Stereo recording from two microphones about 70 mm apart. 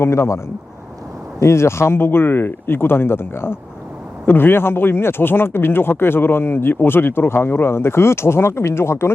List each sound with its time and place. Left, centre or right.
0.0 s speech: left
1.4 s speech: left